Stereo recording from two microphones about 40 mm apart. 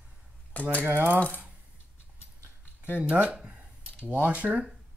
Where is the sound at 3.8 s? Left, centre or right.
Right.